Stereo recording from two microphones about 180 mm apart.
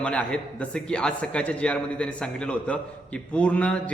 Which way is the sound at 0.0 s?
5° left (ahead or behind).